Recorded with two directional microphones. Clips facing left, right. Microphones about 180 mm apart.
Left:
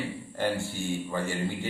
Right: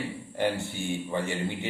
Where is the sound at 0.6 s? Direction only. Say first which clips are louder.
Even; 20° right (ahead or behind).